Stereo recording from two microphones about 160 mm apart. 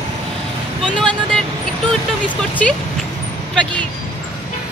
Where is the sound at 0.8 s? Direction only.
5° left (ahead or behind).